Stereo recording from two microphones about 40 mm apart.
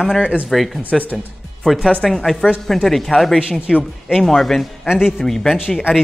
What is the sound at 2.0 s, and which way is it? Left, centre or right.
Speech, centre.